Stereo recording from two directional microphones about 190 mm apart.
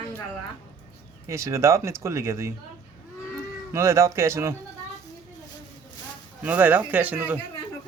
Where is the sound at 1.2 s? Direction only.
15° right (ahead or behind).